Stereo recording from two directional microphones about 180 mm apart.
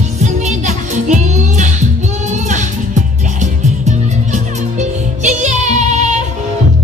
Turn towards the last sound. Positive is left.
turn(degrees=-40)  # may be behind; listen again after turning